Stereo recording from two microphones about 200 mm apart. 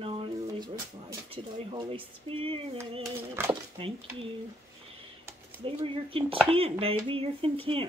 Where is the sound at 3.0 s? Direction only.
15° right (ahead or behind).